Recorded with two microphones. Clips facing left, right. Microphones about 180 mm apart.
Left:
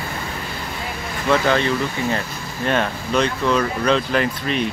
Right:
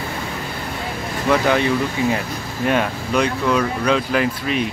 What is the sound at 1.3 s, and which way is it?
Speech, 15° right (ahead or behind).